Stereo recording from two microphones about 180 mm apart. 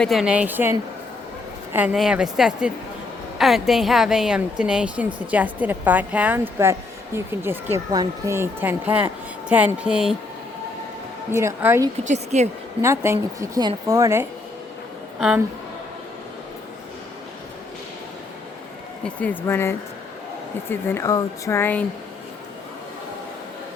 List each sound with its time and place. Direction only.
0.0 s a woman's voice: centre (ahead or behind)
11.3 s a woman's voice: 15° right (ahead or behind)
12.0 s speech: 40° right (ahead or behind)
12.8 s a woman's voice: 15° right (ahead or behind)
19.0 s speech: 10° left (ahead or behind)